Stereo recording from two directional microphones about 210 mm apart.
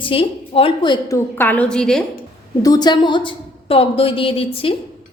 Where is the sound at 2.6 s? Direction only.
20° left (ahead or behind).